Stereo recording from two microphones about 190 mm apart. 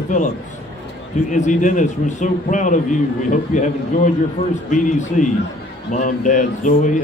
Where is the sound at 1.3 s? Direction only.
40° left (ahead or behind).